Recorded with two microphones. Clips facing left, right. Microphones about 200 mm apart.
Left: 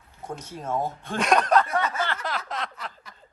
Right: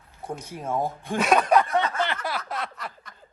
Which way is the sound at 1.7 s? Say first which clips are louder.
Right 2 dB; 20° right (ahead or behind).